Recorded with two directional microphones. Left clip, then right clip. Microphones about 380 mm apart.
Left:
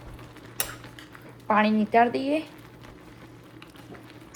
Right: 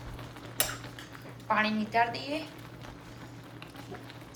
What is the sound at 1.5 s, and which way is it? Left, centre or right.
Speech, centre.